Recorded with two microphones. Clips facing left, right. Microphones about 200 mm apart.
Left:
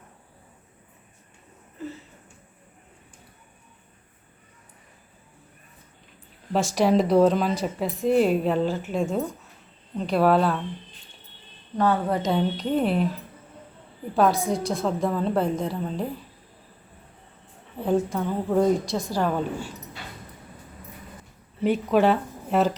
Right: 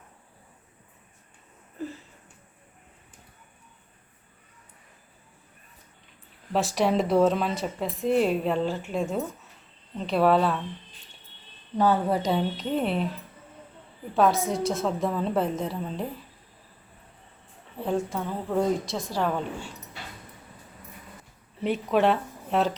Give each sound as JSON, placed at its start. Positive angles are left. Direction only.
{"t": 6.5, "sound": "speech", "side_deg": 0}
{"t": 11.8, "sound": "speech", "side_deg": -5}
{"t": 14.2, "sound": "speech", "side_deg": 0}
{"t": 17.7, "sound": "speech", "side_deg": 0}
{"t": 21.6, "sound": "speech", "side_deg": 0}